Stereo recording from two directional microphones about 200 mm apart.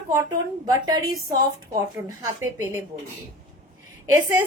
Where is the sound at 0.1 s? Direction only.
20° right (ahead or behind).